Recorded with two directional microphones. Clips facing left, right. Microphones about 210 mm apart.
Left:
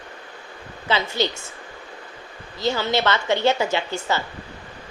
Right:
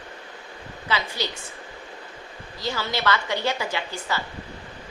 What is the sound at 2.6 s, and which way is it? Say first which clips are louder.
A woman's voice: left 5 dB; 25° left (ahead or behind).